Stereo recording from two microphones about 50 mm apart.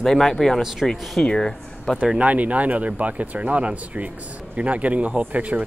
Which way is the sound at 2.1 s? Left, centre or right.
Right.